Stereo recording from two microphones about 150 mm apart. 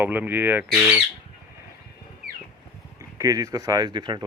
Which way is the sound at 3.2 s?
25° right (ahead or behind).